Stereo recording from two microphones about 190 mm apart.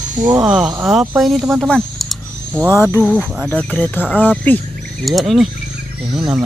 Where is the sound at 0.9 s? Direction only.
5° right (ahead or behind).